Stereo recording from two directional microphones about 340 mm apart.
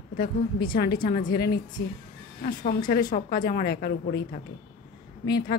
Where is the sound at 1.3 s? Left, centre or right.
Left.